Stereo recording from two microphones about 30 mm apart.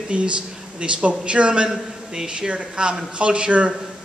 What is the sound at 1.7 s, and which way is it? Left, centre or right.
Speech, right.